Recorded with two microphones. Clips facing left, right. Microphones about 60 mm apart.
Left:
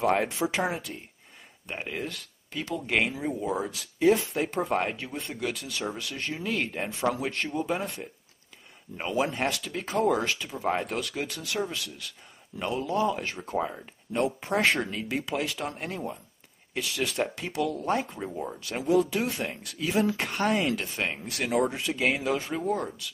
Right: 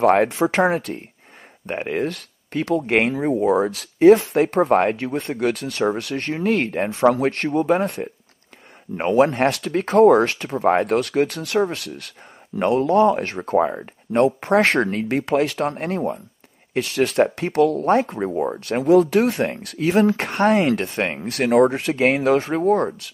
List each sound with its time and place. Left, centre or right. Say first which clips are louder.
0.0 s speech: right 9 dB; right
16.7 s speech: right 11 dB; right